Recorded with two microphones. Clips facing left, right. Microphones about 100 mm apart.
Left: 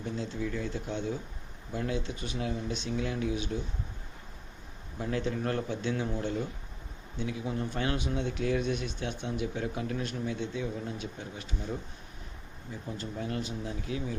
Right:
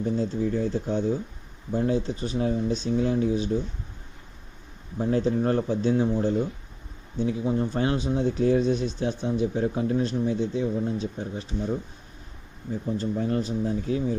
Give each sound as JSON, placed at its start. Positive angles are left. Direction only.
{"t": 0.0, "sound": "speech", "side_deg": -40}
{"t": 4.9, "sound": "speech", "side_deg": -35}
{"t": 12.7, "sound": "speech", "side_deg": -40}